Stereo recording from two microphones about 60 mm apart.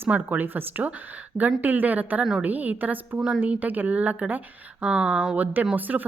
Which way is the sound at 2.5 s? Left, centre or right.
Right.